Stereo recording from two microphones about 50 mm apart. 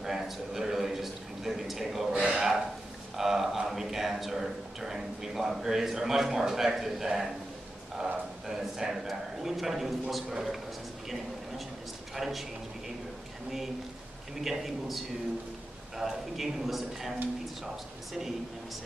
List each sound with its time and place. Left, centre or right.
0.0 s a man's voice: centre
2.1 s a man's voice: centre
8.5 s a man's voice: centre
12.2 s a man's voice: centre
14.3 s a man's voice: centre